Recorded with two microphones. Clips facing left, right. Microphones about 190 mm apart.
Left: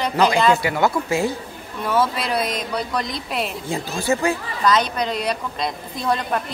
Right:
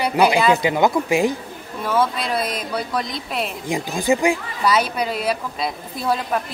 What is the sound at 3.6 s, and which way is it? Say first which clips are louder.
Speech: right 5 dB; 15° right (ahead or behind).